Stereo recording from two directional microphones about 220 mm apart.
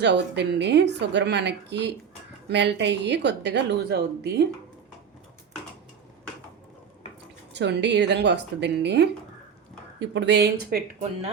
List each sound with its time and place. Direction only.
0.0 s a woman's voice: 50° right (ahead or behind)
7.5 s a woman's voice: 50° right (ahead or behind)